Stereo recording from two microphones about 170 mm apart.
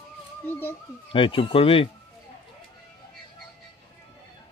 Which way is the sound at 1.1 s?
30° left (ahead or behind).